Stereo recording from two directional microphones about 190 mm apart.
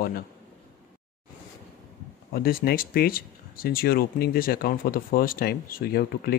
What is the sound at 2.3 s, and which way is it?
Speech, 50° left (ahead or behind).